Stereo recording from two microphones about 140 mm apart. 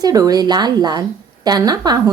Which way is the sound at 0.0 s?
25° right (ahead or behind).